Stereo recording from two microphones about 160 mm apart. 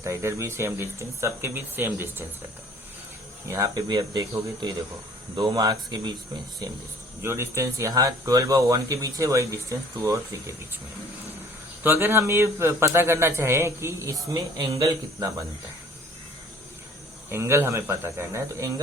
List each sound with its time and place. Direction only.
0.0 s speech: 20° right (ahead or behind)
3.5 s speech: 20° right (ahead or behind)
7.2 s speech: 15° right (ahead or behind)
11.8 s speech: 15° right (ahead or behind)
17.3 s speech: 15° right (ahead or behind)